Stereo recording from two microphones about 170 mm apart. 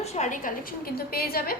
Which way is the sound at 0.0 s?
40° left (ahead or behind).